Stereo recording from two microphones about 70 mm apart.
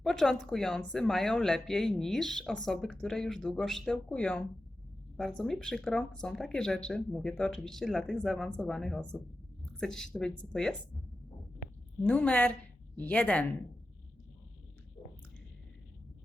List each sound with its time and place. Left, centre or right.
0.0 s speech: centre
12.0 s speech: left